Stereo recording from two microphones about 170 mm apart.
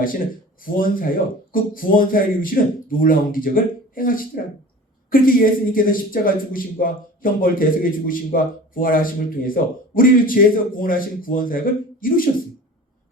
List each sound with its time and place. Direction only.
0.6 s speech: 55° left (ahead or behind)